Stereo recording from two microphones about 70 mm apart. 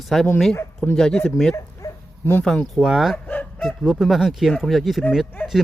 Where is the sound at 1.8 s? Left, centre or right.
Left.